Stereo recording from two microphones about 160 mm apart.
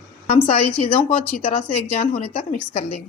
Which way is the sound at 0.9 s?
10° left (ahead or behind).